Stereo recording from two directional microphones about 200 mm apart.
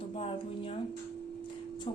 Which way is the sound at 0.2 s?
30° left (ahead or behind).